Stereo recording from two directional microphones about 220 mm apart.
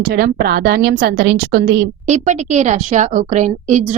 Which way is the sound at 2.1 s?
30° right (ahead or behind).